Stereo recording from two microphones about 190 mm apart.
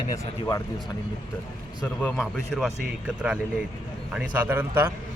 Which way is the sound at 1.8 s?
5° left (ahead or behind).